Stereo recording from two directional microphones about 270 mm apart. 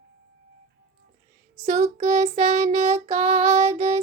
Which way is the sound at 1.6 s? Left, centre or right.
Right.